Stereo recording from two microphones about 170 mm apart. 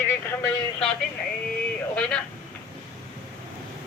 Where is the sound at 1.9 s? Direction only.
5° left (ahead or behind).